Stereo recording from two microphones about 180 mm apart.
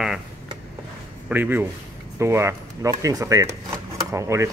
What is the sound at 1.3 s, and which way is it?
A man's voice, 10° right (ahead or behind).